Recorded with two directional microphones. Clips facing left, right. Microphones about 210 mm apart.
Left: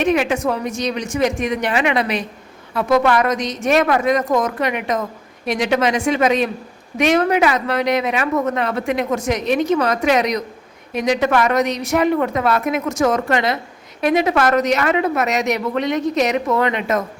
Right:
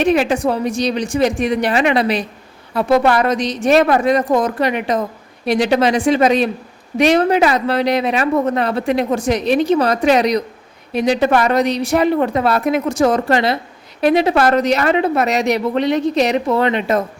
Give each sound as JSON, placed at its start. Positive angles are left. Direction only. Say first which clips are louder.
{"t": 0.0, "sound": "a woman's voice", "louder": "right 3 dB", "side_deg": -35}